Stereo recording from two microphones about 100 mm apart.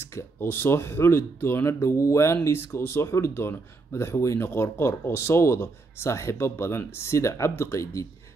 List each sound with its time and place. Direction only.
0.0 s speech: 25° left (ahead or behind)